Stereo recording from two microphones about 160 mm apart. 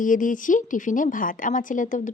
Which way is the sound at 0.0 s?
55° left (ahead or behind).